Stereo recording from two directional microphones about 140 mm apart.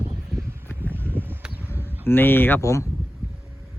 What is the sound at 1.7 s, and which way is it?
Speech, 15° left (ahead or behind).